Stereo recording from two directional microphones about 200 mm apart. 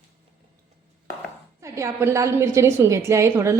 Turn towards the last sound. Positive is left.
turn(degrees=-15)  # may be behind; listen again after turning